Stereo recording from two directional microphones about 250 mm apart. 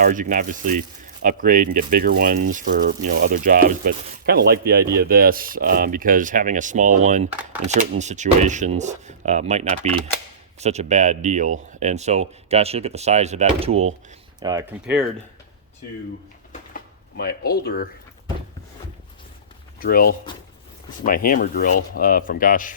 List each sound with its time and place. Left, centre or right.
0.0 s speech: right
14.3 s speech: centre
16.5 s drawer open or close: left
19.8 s speech: left